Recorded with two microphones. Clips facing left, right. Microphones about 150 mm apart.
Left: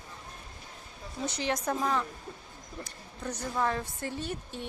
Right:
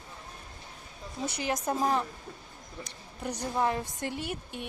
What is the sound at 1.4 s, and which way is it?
Speech, 5° right (ahead or behind).